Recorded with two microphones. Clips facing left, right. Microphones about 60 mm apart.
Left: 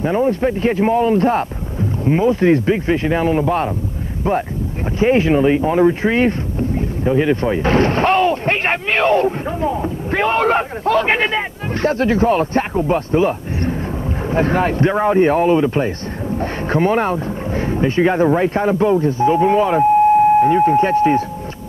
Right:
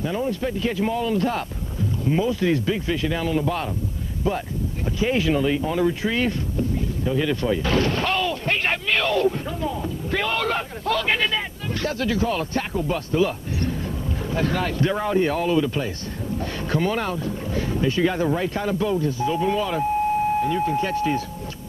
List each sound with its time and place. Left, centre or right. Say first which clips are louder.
0.0 s speech: left 9 dB; left
4.9 s speech: left 8 dB; left